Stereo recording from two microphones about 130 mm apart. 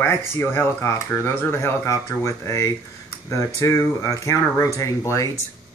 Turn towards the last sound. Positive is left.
turn(degrees=25)  # may be behind; listen again after turning